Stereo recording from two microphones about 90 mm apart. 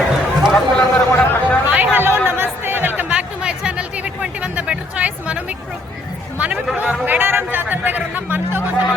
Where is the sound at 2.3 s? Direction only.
25° right (ahead or behind).